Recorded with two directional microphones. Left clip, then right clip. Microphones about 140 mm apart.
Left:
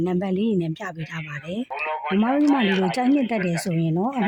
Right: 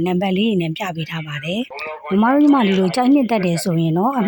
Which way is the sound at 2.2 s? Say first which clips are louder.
Right 7 dB; 20° right (ahead or behind).